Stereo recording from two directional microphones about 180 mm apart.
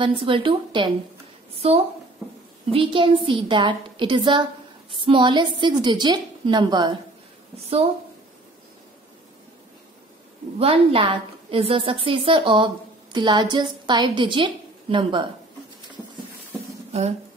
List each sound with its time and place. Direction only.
0.0 s a woman's voice: 30° right (ahead or behind)
10.6 s a woman's voice: 30° right (ahead or behind)